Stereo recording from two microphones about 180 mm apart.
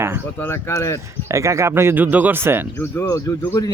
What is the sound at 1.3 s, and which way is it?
Speech, 15° right (ahead or behind).